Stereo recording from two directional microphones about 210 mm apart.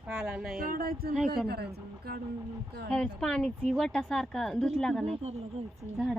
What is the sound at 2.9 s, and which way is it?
Speech, 5° left (ahead or behind).